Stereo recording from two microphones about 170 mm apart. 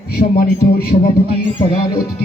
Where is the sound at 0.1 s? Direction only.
65° left (ahead or behind).